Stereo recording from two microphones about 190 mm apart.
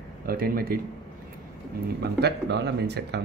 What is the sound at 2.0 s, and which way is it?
Speech, 60° right (ahead or behind).